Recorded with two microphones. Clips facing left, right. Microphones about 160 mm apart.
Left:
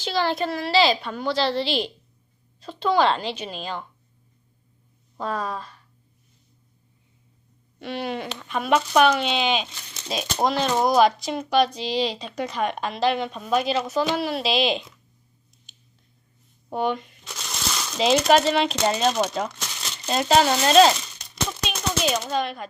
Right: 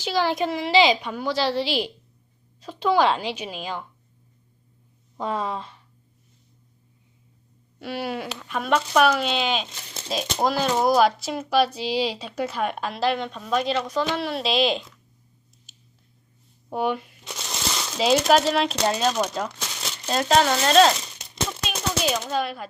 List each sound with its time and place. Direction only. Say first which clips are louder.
0.0 s a woman's voice: right 1 dB; 10° right (ahead or behind)
5.1 s speech: right 1 dB; 20° right (ahead or behind)
7.8 s speech: even; 5° right (ahead or behind)
15.7 s clicking: even; 5° right (ahead or behind)
16.6 s speech: even; 10° right (ahead or behind)
21.6 s a sound: left 1 dB; centre (ahead or behind)